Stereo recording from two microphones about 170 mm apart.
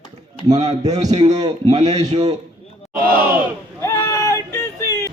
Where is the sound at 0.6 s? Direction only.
25° right (ahead or behind).